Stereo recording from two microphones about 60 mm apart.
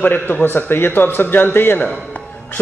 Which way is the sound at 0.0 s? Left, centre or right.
Left.